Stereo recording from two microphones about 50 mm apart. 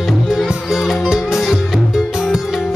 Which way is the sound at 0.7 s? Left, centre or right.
Centre.